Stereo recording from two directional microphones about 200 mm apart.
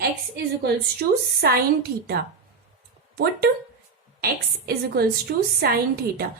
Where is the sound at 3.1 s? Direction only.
50° right (ahead or behind).